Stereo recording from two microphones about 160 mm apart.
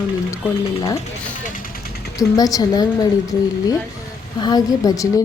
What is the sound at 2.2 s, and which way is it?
Speech, 20° left (ahead or behind).